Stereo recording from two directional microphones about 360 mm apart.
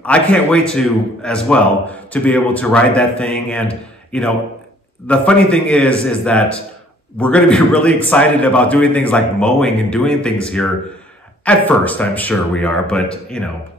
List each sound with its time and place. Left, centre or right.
0.0 s a man's voice: centre